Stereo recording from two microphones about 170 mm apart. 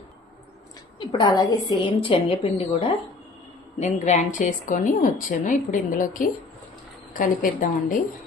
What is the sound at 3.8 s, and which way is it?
A woman's voice, 45° left (ahead or behind).